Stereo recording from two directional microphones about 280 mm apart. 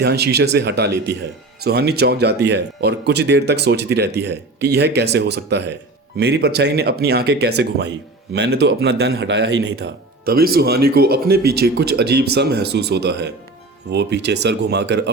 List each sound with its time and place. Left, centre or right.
0.0 s speech: right